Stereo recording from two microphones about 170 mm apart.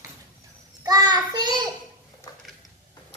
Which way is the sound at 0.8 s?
25° right (ahead or behind).